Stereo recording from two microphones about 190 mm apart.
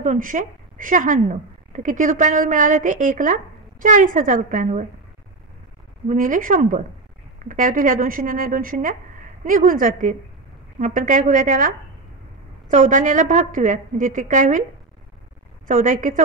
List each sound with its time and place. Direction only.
0.0 s a woman's voice: 40° right (ahead or behind)
6.0 s a woman's voice: 45° right (ahead or behind)
15.6 s a woman's voice: 45° right (ahead or behind)